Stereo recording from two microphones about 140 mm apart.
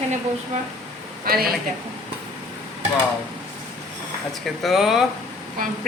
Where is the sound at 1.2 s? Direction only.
90° right.